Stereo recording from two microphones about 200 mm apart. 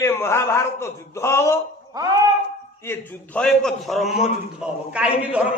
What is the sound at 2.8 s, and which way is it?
A man's voice, 10° left (ahead or behind).